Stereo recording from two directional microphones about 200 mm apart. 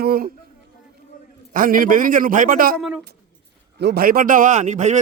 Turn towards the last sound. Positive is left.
turn(degrees=-35)  # may be behind; listen again after turning